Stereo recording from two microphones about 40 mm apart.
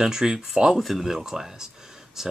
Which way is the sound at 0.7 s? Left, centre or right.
Centre.